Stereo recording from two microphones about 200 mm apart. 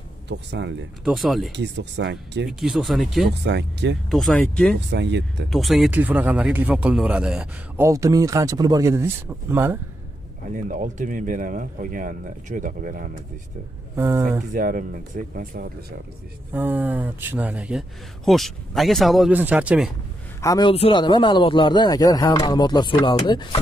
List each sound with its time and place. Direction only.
0.3 s speech: 60° right (ahead or behind)
1.0 s speech: centre (ahead or behind)
1.5 s speech: 60° right (ahead or behind)
2.6 s speech: centre (ahead or behind)
3.3 s speech: 60° right (ahead or behind)
4.1 s speech: 5° left (ahead or behind)
4.7 s speech: 60° right (ahead or behind)
5.5 s speech: centre (ahead or behind)
10.5 s speech: 40° right (ahead or behind)
13.9 s speech: 15° right (ahead or behind)
14.5 s speech: 45° right (ahead or behind)
16.5 s speech: 10° right (ahead or behind)
20.4 s speech: 20° left (ahead or behind)